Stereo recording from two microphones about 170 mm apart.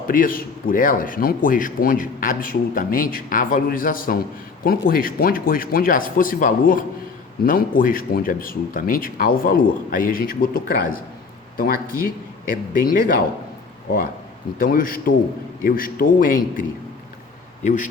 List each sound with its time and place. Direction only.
0.1 s a man's voice: 55° left (ahead or behind)
14.6 s a man's voice: 55° left (ahead or behind)